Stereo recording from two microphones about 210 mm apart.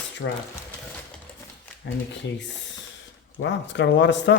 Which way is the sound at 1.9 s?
60° left (ahead or behind).